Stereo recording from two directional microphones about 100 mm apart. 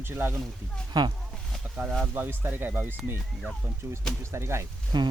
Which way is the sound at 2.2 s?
20° right (ahead or behind).